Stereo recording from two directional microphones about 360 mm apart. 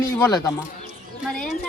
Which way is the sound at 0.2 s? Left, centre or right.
Centre.